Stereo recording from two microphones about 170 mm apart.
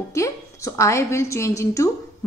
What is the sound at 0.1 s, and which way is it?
A woman's voice, 15° left (ahead or behind).